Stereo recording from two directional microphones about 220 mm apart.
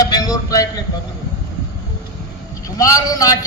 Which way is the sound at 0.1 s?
15° left (ahead or behind).